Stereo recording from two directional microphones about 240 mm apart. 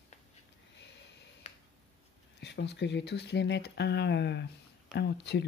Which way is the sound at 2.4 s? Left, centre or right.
Left.